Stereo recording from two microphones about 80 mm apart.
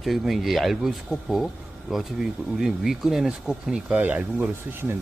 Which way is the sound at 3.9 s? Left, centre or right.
Centre.